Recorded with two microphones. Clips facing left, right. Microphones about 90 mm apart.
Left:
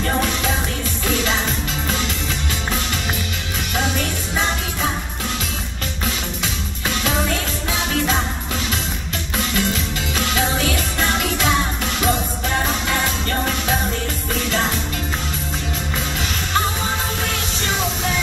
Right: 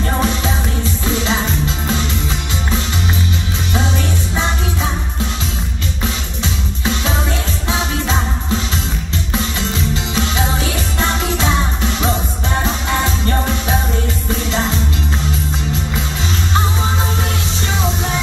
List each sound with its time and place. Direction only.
9.6 s music: 30° right (ahead or behind)
13.3 s music: 25° right (ahead or behind)